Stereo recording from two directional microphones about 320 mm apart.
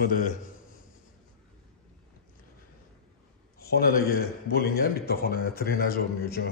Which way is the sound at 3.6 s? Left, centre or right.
Left.